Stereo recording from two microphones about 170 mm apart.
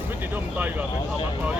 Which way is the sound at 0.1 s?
10° right (ahead or behind).